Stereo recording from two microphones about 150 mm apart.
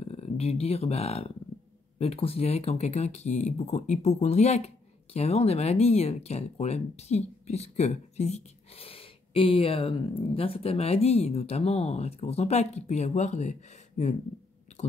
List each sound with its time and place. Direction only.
0.0 s speech: 45° left (ahead or behind)